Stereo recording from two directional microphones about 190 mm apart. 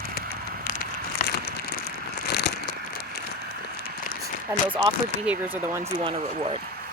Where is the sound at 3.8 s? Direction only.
50° left (ahead or behind).